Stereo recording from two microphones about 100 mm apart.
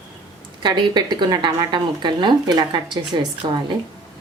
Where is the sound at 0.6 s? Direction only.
50° right (ahead or behind).